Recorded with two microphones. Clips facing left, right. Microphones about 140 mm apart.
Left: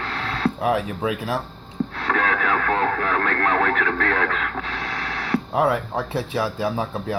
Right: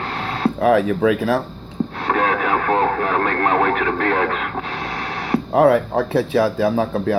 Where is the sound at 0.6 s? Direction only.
60° right (ahead or behind).